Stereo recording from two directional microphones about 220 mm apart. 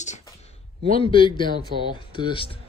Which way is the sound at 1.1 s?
20° left (ahead or behind).